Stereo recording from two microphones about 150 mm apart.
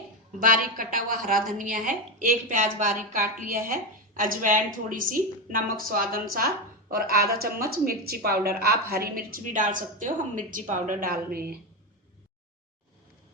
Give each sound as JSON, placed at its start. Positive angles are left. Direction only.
{"t": 0.3, "sound": "a woman's voice", "side_deg": -70}
{"t": 6.9, "sound": "a woman's voice", "side_deg": -90}